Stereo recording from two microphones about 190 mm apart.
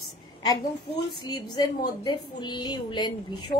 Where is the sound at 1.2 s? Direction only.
20° left (ahead or behind).